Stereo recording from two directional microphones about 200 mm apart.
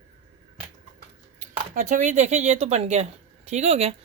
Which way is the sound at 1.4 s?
40° right (ahead or behind).